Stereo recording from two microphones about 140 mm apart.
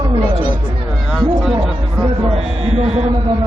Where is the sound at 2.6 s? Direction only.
50° right (ahead or behind).